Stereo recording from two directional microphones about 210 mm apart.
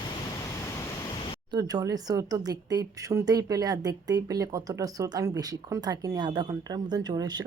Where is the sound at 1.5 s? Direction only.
15° right (ahead or behind).